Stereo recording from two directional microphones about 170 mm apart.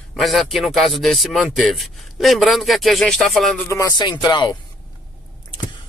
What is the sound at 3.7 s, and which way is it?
Speech, 20° left (ahead or behind).